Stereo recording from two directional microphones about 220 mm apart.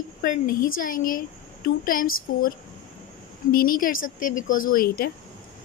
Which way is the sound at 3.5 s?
40° left (ahead or behind).